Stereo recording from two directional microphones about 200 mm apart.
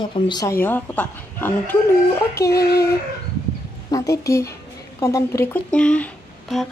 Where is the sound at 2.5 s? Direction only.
55° left (ahead or behind).